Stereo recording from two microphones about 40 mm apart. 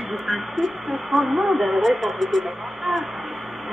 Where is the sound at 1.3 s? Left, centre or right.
Centre.